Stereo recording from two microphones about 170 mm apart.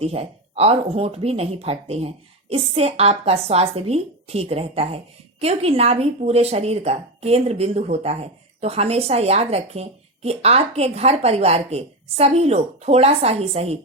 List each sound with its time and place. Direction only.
0.0 s speech: 35° right (ahead or behind)